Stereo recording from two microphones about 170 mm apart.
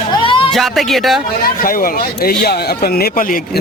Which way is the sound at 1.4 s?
55° left (ahead or behind).